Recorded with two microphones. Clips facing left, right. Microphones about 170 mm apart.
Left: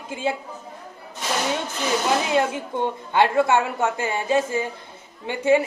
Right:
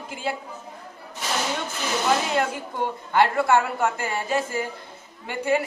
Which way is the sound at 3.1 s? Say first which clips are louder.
Left 1 dB; 20° left (ahead or behind).